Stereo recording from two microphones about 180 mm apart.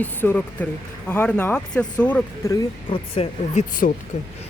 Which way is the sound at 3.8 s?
55° left (ahead or behind).